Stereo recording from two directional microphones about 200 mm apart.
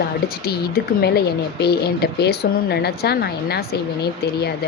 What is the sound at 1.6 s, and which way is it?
A woman's voice, 55° left (ahead or behind).